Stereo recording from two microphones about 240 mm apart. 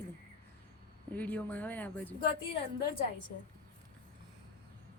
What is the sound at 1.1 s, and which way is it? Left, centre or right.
Speech, centre.